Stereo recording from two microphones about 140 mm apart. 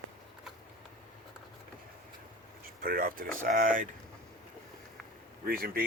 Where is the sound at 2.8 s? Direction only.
90° right.